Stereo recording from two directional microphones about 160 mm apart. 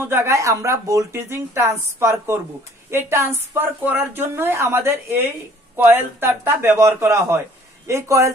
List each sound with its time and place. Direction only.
0.0 s speech: 15° right (ahead or behind)